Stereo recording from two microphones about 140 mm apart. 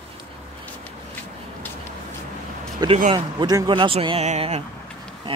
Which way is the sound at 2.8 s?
30° right (ahead or behind).